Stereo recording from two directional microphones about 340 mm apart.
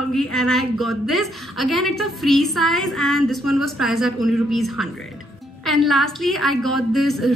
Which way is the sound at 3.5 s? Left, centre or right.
Left.